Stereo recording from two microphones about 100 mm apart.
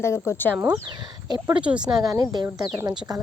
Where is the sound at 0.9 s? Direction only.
45° right (ahead or behind).